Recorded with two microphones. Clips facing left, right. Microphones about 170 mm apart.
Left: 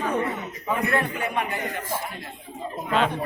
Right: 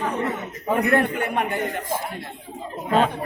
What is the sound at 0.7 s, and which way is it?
A man's voice, 50° right (ahead or behind).